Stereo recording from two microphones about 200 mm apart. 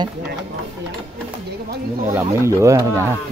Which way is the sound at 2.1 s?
15° right (ahead or behind).